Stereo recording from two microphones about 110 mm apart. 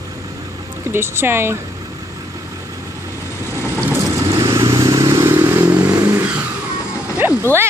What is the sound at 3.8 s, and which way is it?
Vehicle, 25° right (ahead or behind).